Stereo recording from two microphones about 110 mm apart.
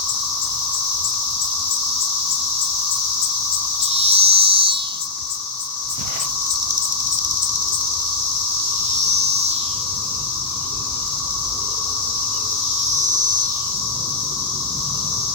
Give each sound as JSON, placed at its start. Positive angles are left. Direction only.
{"t": 3.9, "sound": "cricket", "side_deg": -60}